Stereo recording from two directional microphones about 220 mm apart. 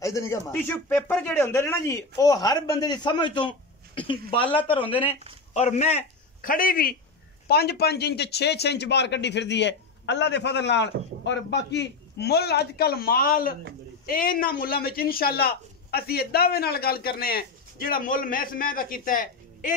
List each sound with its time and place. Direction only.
0.0 s a man's voice: 15° left (ahead or behind); by 19.7 s 40° left (ahead or behind)